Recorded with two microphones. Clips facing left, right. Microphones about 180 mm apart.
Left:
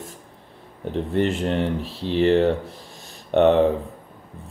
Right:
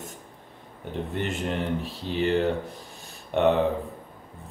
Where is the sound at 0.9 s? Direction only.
30° left (ahead or behind).